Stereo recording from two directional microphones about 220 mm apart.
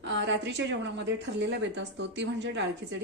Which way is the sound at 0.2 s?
55° right (ahead or behind).